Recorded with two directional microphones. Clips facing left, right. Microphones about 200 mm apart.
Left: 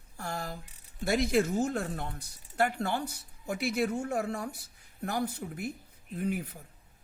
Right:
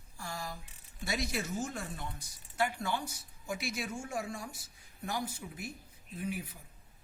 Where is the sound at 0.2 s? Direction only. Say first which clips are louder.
Left 5 dB; 60° left (ahead or behind).